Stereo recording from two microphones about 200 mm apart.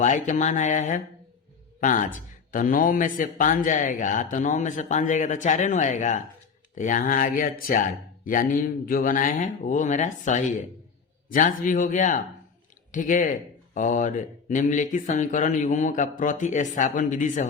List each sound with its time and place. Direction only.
0.0 s a man's voice: 40° left (ahead or behind)